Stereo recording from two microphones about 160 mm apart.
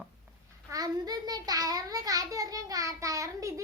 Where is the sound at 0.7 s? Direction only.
25° right (ahead or behind).